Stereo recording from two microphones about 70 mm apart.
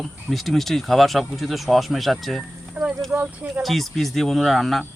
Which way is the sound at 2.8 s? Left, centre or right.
Right.